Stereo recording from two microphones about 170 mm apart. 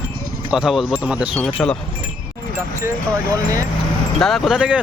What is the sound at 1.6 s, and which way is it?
Wind chime, 10° left (ahead or behind).